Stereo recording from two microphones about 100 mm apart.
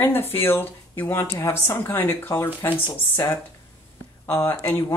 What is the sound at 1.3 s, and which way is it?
Speech, 30° left (ahead or behind).